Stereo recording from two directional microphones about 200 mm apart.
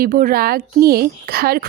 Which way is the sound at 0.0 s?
45° right (ahead or behind).